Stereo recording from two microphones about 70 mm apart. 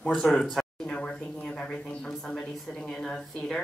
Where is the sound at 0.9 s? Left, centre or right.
Centre.